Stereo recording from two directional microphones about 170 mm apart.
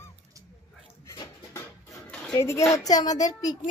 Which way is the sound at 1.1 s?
15° left (ahead or behind).